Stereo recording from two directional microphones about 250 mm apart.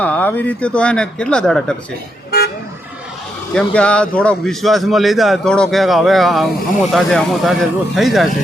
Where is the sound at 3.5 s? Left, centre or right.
Centre.